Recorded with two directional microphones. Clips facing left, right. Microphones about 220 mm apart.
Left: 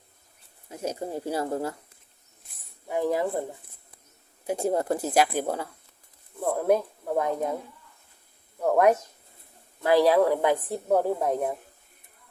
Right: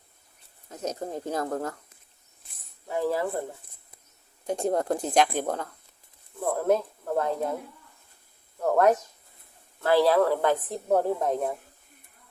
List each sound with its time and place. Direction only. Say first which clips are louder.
0.7 s speech: left 1 dB; 10° left (ahead or behind)
2.8 s speech: left 1 dB; 15° left (ahead or behind)
4.4 s speech: even; 5° left (ahead or behind)
8.5 s speech: left 1 dB; 10° left (ahead or behind)